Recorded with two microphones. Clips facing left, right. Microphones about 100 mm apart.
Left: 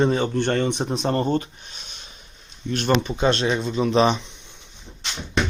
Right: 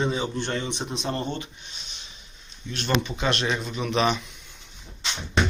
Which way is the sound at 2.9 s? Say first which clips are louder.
Left 5 dB; 30° left (ahead or behind).